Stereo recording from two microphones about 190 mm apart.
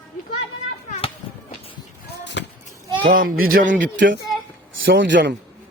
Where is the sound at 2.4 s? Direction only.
65° left (ahead or behind).